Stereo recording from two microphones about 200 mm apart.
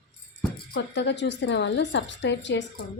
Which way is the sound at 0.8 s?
60° left (ahead or behind).